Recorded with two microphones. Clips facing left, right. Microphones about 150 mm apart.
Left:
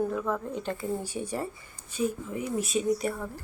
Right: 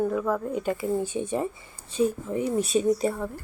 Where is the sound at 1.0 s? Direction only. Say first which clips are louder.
Right 6 dB; 20° right (ahead or behind).